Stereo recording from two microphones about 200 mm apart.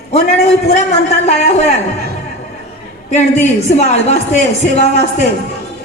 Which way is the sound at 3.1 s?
35° left (ahead or behind).